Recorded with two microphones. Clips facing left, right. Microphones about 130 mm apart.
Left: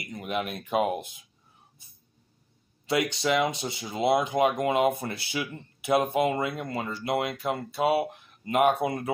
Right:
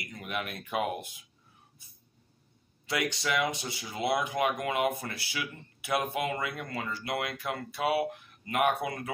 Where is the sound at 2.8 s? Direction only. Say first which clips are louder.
Left 5 dB; 25° left (ahead or behind).